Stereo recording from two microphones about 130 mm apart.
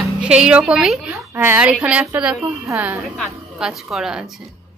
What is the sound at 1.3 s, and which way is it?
A woman's voice, 15° right (ahead or behind).